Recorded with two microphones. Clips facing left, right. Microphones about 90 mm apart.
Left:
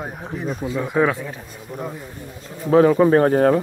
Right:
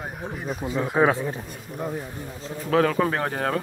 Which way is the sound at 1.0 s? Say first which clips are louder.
Right 1 dB; 25° right (ahead or behind).